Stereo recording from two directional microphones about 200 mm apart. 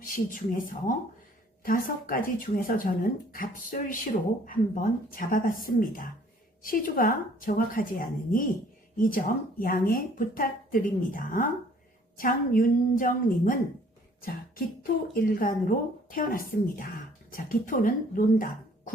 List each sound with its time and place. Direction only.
0.3 s speech: 45° left (ahead or behind)
15.1 s speech: 45° left (ahead or behind)